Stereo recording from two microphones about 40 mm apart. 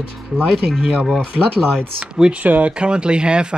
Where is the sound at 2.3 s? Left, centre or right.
Right.